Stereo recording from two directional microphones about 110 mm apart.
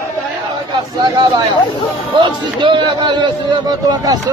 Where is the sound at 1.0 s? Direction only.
45° right (ahead or behind).